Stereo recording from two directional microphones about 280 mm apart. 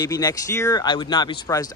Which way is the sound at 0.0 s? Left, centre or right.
Centre.